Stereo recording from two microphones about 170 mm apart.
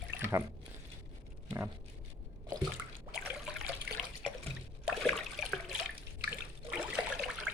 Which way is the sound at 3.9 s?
70° right (ahead or behind).